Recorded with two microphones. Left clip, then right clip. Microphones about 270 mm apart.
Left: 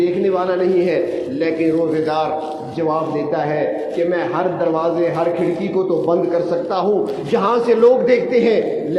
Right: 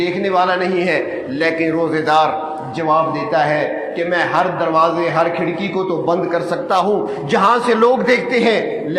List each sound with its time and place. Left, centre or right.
0.0 s a man's voice: right
7.3 s a man's voice: right